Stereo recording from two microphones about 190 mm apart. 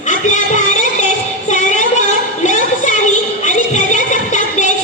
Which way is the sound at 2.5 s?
40° left (ahead or behind).